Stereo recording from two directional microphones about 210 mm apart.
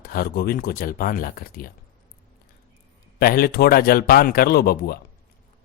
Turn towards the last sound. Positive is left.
turn(degrees=45)  # may be behind; listen again after turning